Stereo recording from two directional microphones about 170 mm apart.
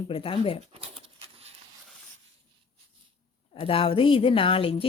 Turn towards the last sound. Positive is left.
turn(degrees=35)  # may be behind; listen again after turning